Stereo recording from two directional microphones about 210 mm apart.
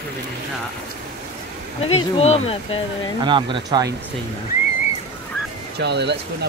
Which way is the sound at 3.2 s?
20° right (ahead or behind).